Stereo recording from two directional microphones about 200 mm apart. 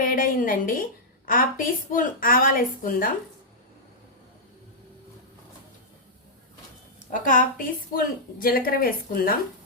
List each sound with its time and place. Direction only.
0.0 s a woman's voice: 45° left (ahead or behind)
7.1 s a woman's voice: 40° left (ahead or behind)